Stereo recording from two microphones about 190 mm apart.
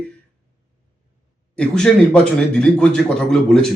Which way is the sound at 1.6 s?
5° left (ahead or behind).